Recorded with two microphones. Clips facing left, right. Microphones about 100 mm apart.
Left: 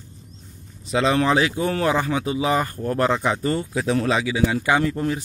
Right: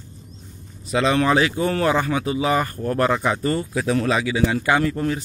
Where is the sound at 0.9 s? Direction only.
25° left (ahead or behind).